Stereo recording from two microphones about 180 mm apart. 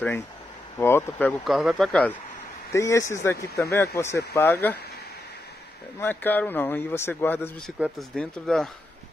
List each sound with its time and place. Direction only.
0.7 s speech: 10° left (ahead or behind)
1.4 s speech: centre (ahead or behind)
2.7 s speech: 15° left (ahead or behind)
5.9 s speech: 10° left (ahead or behind)